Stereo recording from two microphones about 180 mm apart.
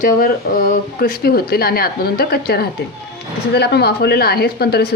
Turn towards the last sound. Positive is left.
turn(degrees=60)  # may be behind; listen again after turning